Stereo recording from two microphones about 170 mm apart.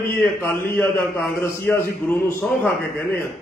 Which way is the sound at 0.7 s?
15° left (ahead or behind).